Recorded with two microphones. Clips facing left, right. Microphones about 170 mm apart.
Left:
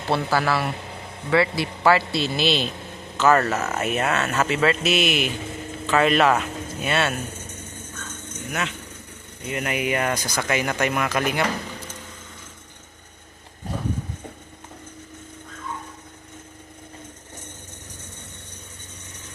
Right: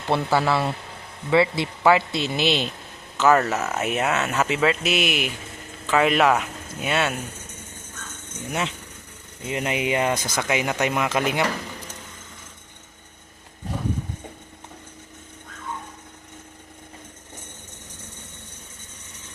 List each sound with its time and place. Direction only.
0.1 s speech: 25° right (ahead or behind)
3.2 s speech: centre (ahead or behind)
3.8 s speech: 15° right (ahead or behind)
9.5 s speech: 25° right (ahead or behind)